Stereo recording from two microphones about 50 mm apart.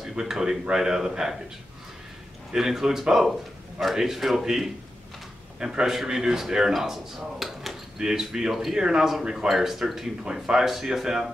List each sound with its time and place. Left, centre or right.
0.1 s speech: centre
2.5 s speech: centre